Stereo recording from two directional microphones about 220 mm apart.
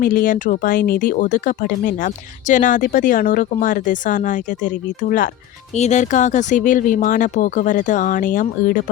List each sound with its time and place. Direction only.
0.0 s speech: 40° left (ahead or behind)